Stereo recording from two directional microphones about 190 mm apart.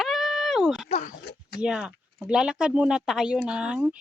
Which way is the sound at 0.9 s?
35° left (ahead or behind).